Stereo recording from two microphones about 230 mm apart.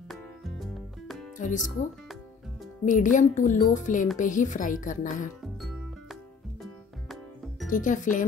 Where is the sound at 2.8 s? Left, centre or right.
Left.